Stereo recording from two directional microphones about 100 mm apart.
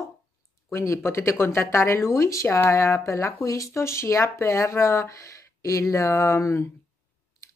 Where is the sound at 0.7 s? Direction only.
25° left (ahead or behind).